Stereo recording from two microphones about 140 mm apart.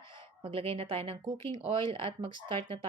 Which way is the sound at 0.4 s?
40° right (ahead or behind).